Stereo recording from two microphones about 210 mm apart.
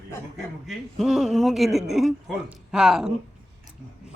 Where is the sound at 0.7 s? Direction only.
Centre (ahead or behind).